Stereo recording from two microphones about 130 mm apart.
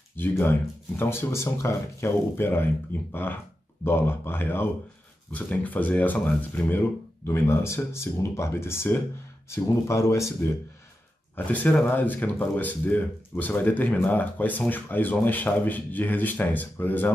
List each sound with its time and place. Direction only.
0.2 s speech: 15° left (ahead or behind)